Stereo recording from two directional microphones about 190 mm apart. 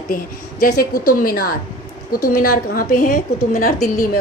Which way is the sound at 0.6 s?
50° left (ahead or behind).